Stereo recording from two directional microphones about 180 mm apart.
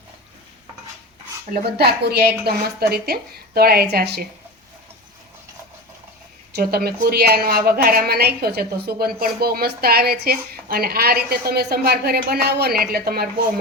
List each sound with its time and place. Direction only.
1.5 s speech: 60° right (ahead or behind)
6.6 s speech: 60° right (ahead or behind)